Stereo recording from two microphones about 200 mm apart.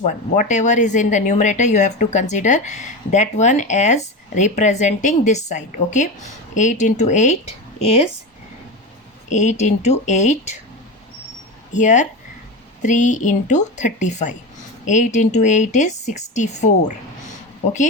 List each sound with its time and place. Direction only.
0.0 s a woman's voice: 40° left (ahead or behind)
9.3 s a woman's voice: 35° left (ahead or behind)
11.7 s a woman's voice: 40° left (ahead or behind)